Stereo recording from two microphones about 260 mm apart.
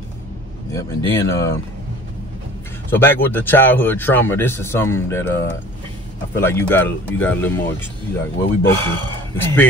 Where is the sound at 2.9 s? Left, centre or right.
Centre.